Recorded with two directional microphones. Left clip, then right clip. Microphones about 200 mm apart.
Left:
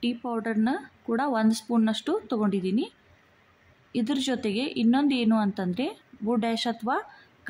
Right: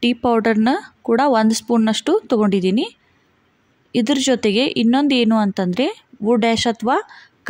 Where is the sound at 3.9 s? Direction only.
35° right (ahead or behind).